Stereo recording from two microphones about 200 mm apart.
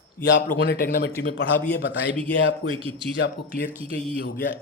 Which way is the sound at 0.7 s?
50° left (ahead or behind).